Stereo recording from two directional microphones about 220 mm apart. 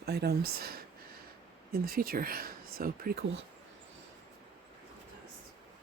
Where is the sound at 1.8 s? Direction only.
40° right (ahead or behind).